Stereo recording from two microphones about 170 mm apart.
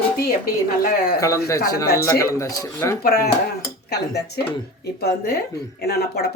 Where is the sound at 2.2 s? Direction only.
20° left (ahead or behind).